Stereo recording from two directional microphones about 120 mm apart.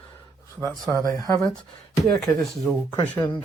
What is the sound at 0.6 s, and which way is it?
Speech, 30° right (ahead or behind).